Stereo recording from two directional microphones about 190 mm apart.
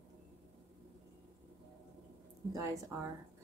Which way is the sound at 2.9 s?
10° right (ahead or behind).